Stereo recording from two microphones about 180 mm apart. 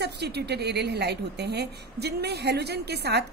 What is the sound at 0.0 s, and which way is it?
A woman's voice, 70° right (ahead or behind).